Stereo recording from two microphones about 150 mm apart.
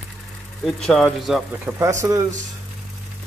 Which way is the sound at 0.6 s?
5° left (ahead or behind).